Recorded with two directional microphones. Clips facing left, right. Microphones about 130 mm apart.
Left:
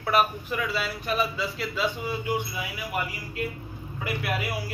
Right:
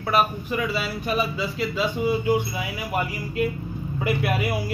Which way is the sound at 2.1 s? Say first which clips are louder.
Right 7 dB; 20° right (ahead or behind).